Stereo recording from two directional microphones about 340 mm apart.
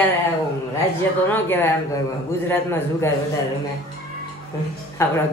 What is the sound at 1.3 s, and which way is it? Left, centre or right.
A woman's voice, centre.